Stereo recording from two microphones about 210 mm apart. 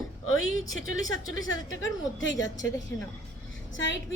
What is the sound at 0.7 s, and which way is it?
A woman's voice, 70° left (ahead or behind).